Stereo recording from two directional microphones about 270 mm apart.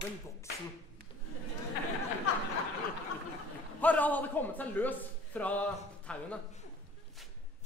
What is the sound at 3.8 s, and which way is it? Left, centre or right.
A man's voice, centre.